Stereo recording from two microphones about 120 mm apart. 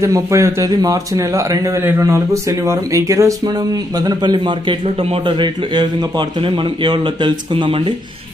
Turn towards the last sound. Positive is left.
turn(degrees=-45)  # may be behind; listen again after turning